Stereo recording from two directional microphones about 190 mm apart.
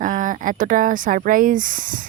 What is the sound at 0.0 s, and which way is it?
Speech, 45° right (ahead or behind).